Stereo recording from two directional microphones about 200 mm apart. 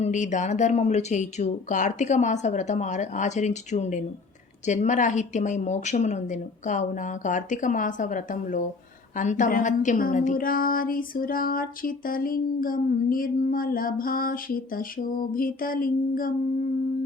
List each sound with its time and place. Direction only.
0.0 s speech: 35° left (ahead or behind)